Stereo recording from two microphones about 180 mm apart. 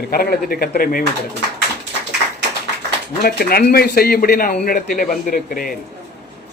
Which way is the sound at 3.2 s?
60° left (ahead or behind).